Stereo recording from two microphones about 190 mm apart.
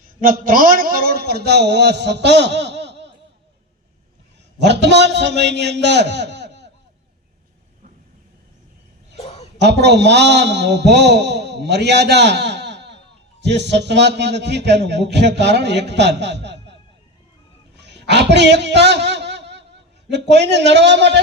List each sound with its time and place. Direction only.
0.2 s a man's voice: 45° right (ahead or behind); by 3.1 s 65° right (ahead or behind)
4.5 s a man's voice: 65° right (ahead or behind)
9.1 s a sound: 35° left (ahead or behind)
9.6 s a man's voice: 65° right (ahead or behind)
17.7 s a sound: 65° right (ahead or behind)
20.1 s a man's voice: 65° right (ahead or behind)